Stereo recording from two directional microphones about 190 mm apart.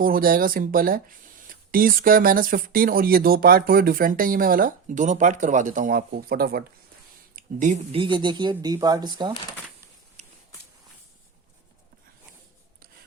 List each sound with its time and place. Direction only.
0.0 s speech: 50° right (ahead or behind)
7.3 s speech: 40° right (ahead or behind)
7.9 s speech: 25° right (ahead or behind)
10.2 s a sound: 35° right (ahead or behind)